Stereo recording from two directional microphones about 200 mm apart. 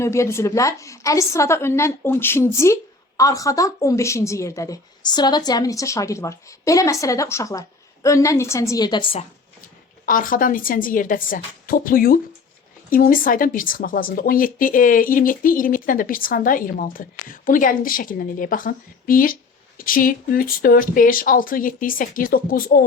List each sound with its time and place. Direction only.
0.0 s a woman's voice: 15° left (ahead or behind)
10.1 s speech: 40° left (ahead or behind)